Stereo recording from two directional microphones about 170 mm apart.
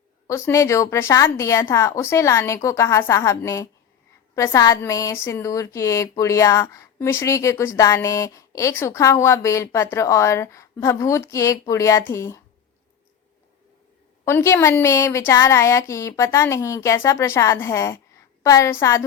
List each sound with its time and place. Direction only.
0.3 s speech: 15° left (ahead or behind)
14.3 s speech: 15° left (ahead or behind)